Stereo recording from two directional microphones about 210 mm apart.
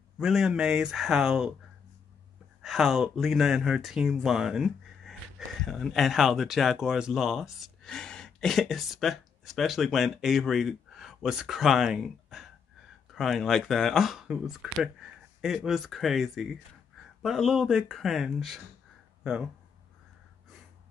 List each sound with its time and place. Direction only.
0.2 s speech: centre (ahead or behind)
2.6 s speech: centre (ahead or behind)